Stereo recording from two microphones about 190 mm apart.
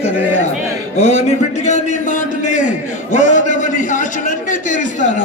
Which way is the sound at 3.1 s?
40° left (ahead or behind).